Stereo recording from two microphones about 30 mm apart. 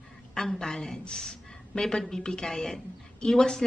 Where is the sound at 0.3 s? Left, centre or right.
Left.